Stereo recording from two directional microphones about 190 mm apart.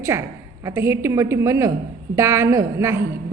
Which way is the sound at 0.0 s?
15° right (ahead or behind).